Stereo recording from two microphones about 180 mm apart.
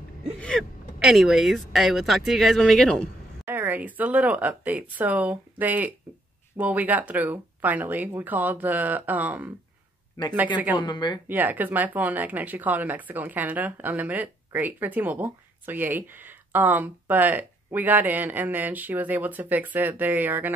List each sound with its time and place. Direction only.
0.4 s speech: 5° left (ahead or behind)
3.4 s speech: 10° right (ahead or behind)
6.1 s a sound: 10° right (ahead or behind)
6.5 s speech: 10° right (ahead or behind)
10.8 s speech: 25° left (ahead or behind)
11.2 s speech: 10° right (ahead or behind)